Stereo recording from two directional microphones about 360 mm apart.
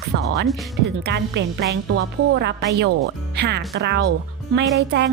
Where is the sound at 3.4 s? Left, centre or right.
Right.